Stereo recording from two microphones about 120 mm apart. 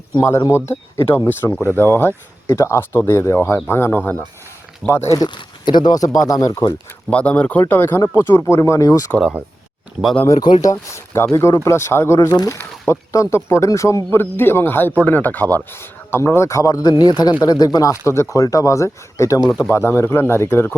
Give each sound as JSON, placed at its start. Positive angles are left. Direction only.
{"t": 0.2, "sound": "speech", "side_deg": 25}
{"t": 7.1, "sound": "speech", "side_deg": 10}
{"t": 10.4, "sound": "speech", "side_deg": 35}